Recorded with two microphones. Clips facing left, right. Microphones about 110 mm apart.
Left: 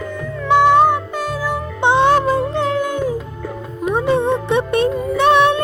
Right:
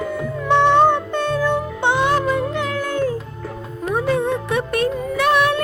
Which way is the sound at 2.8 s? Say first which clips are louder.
Left 1 dB; 15° left (ahead or behind).